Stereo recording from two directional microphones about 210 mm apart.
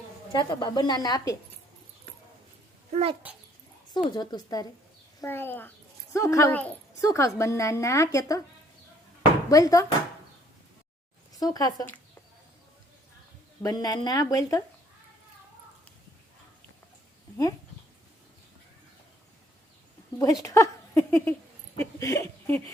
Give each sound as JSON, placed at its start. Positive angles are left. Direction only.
{"t": 0.3, "sound": "a woman's voice", "side_deg": 20}
{"t": 2.9, "sound": "speech", "side_deg": -30}
{"t": 3.9, "sound": "a woman's voice", "side_deg": 20}
{"t": 9.5, "sound": "a woman's voice", "side_deg": 15}
{"t": 11.3, "sound": "a woman's voice", "side_deg": 15}
{"t": 13.6, "sound": "a woman's voice", "side_deg": 15}
{"t": 20.1, "sound": "speech", "side_deg": 15}